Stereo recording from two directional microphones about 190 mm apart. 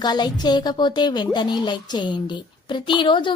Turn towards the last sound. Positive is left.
turn(degrees=25)  # may be behind; listen again after turning